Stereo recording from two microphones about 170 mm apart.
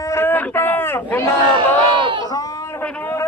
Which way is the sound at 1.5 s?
30° right (ahead or behind).